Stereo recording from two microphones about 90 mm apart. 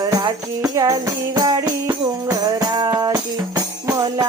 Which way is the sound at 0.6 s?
40° right (ahead or behind).